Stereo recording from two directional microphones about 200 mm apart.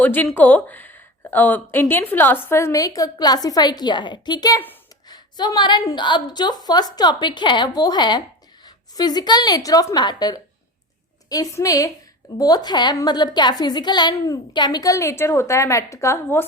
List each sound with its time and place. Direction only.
0.0 s a woman's voice: 10° left (ahead or behind)